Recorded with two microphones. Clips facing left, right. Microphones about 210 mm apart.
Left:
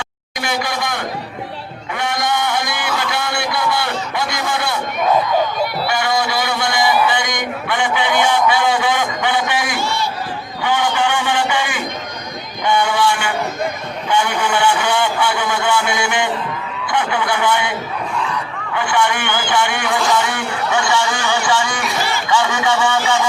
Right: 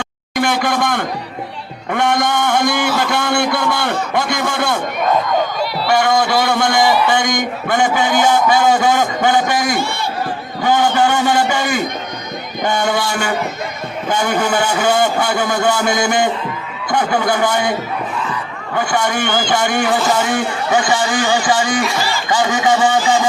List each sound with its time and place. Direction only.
0.3 s a man's voice: 50° right (ahead or behind)
5.9 s a man's voice: 50° right (ahead or behind)
10.6 s a sound: 40° right (ahead or behind)
14.1 s a man's voice: 40° right (ahead or behind)